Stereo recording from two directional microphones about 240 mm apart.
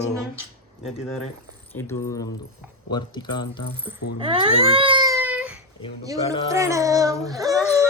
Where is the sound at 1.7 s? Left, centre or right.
Centre.